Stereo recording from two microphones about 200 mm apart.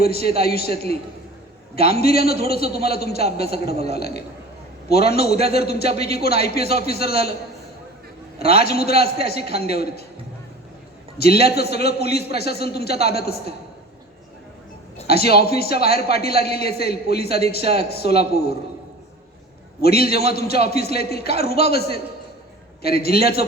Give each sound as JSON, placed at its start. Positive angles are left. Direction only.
{"t": 0.0, "sound": "a man's voice", "side_deg": 50}
{"t": 1.7, "sound": "a man's voice", "side_deg": 50}
{"t": 8.4, "sound": "a man's voice", "side_deg": 50}
{"t": 11.2, "sound": "a man's voice", "side_deg": 50}
{"t": 15.0, "sound": "a man's voice", "side_deg": 50}
{"t": 19.8, "sound": "a man's voice", "side_deg": 50}
{"t": 23.0, "sound": "a man's voice", "side_deg": 50}